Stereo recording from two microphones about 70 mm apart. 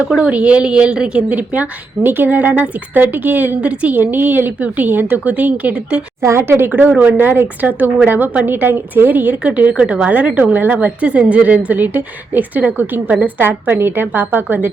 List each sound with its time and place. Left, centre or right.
0.2 s a woman's voice: centre
6.2 s a woman's voice: right
6.7 s a woman's voice: right